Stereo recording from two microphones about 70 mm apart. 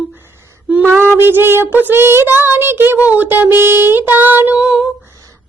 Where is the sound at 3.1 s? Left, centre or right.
Right.